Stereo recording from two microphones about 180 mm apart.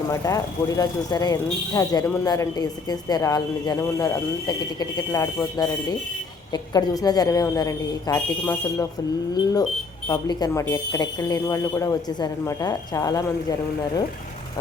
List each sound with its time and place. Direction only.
0.1 s speech: 20° left (ahead or behind)
10.1 s speech: 20° left (ahead or behind)